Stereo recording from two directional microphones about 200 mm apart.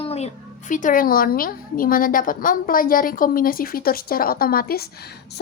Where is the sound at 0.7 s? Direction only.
40° left (ahead or behind).